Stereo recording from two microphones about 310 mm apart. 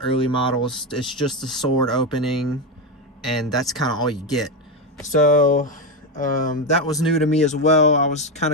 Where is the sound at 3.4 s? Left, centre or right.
Centre.